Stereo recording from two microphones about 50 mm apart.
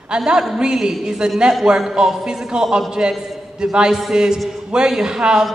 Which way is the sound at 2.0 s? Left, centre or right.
Centre.